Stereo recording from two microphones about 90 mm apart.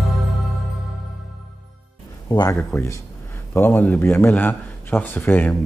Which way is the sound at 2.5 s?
25° left (ahead or behind).